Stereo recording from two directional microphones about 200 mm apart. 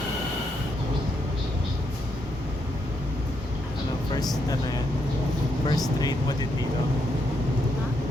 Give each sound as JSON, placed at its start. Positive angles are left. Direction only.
{"t": 4.1, "sound": "speech", "side_deg": 20}